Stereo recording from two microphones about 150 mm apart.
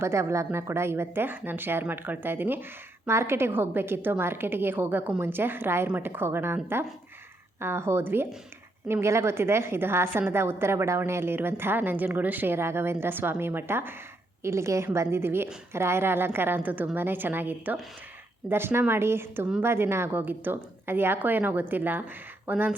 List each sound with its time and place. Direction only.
0.0 s a woman's voice: 20° right (ahead or behind)